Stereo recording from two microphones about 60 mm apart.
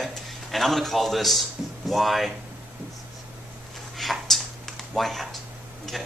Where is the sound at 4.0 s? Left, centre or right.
Centre.